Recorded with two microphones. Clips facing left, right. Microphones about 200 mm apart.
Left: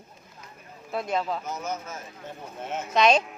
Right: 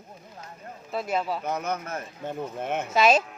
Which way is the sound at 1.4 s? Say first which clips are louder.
Right 3 dB; 60° right (ahead or behind).